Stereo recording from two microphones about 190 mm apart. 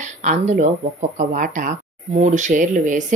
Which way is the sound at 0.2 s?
40° right (ahead or behind).